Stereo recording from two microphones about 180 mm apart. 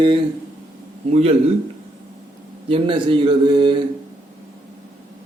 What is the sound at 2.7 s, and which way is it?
Speech, 30° right (ahead or behind).